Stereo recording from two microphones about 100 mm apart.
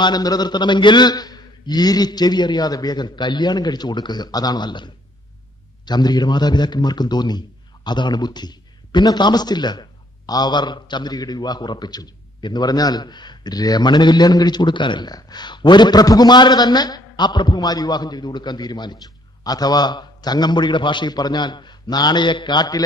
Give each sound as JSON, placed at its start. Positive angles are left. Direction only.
{"t": 0.0, "sound": "a man's voice", "side_deg": 40}